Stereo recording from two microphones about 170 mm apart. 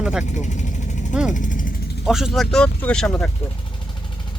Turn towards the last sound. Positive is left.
turn(degrees=5)  # may be behind; listen again after turning